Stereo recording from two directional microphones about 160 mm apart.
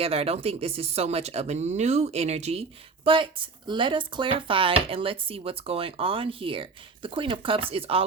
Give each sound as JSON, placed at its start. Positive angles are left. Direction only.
{"t": 0.0, "sound": "speech", "side_deg": -40}